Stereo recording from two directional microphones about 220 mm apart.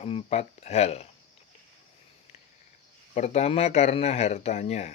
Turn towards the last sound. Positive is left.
turn(degrees=30)  # may be behind; listen again after turning